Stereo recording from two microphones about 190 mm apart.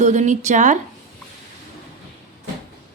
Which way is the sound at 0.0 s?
40° right (ahead or behind).